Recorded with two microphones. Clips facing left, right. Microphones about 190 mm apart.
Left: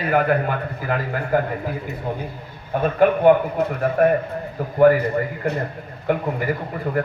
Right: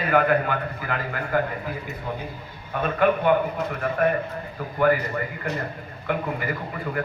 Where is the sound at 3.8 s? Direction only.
45° left (ahead or behind).